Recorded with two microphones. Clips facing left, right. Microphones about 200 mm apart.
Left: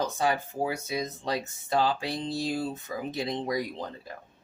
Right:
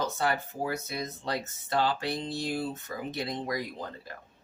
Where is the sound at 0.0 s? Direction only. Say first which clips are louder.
Left 2 dB; 15° left (ahead or behind).